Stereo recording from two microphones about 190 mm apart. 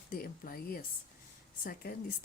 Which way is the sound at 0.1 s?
50° left (ahead or behind).